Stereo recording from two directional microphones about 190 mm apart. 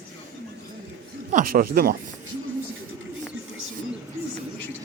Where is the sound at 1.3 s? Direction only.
45° right (ahead or behind).